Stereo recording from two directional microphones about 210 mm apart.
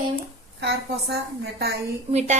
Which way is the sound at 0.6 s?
55° right (ahead or behind).